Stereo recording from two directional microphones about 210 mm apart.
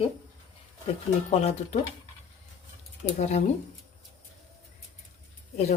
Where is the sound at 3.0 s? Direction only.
30° left (ahead or behind).